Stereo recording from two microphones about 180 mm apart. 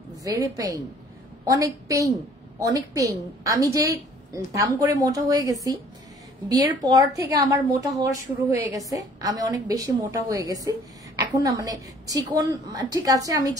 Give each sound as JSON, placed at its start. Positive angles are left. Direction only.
{"t": 0.2, "sound": "a woman's voice", "side_deg": -20}